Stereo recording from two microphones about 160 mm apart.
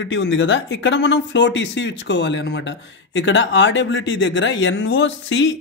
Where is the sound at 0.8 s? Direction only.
90° left.